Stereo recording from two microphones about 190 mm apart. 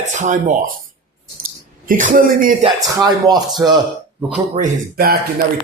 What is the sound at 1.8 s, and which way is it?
Speech, 45° right (ahead or behind).